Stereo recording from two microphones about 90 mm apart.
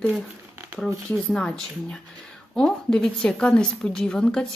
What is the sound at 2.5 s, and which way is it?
Speech, 5° left (ahead or behind).